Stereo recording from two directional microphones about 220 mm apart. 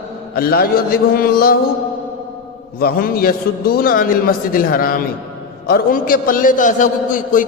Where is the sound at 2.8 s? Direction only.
45° left (ahead or behind).